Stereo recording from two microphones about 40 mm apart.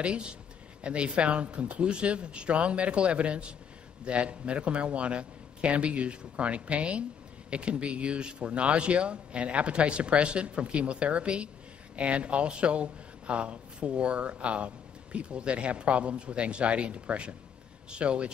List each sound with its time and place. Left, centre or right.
0.0 s a man's voice: right